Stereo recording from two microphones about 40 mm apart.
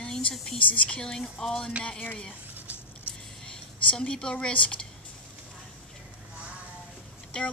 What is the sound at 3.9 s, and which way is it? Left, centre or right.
Speech, left.